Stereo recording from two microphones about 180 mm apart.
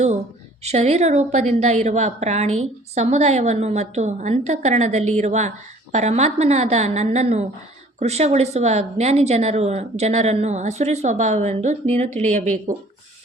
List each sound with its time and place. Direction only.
0.6 s a woman's voice: 35° right (ahead or behind)